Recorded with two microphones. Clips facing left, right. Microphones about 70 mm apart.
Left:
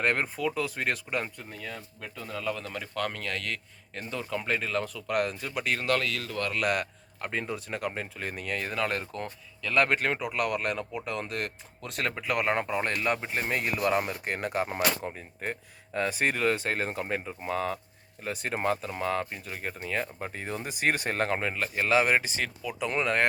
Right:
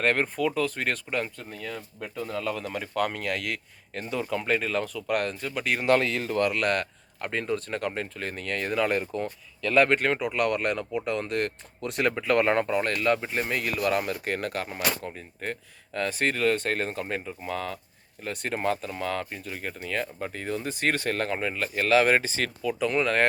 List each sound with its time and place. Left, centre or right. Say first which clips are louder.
0.0 s speech: right 3 dB; centre
2.0 s speech: right 7 dB; centre
5.8 s speech: right 9 dB; right
6.5 s speech: right 2 dB; centre
12.8 s speech: right 4 dB; left
18.2 s speech: right 1 dB; centre
21.2 s speech: even; left
21.8 s speech: right 3 dB; centre